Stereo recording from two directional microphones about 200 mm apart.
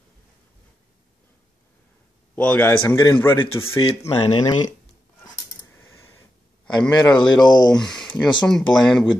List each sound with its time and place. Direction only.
2.3 s a man's voice: 10° left (ahead or behind)
3.6 s speech: 30° left (ahead or behind)
5.8 s a sound: 15° left (ahead or behind)
6.8 s a man's voice: 5° left (ahead or behind)
7.2 s speech: 20° left (ahead or behind)
7.7 s speech: 5° left (ahead or behind)